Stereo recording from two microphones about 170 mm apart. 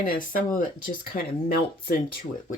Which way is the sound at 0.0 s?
55° left (ahead or behind).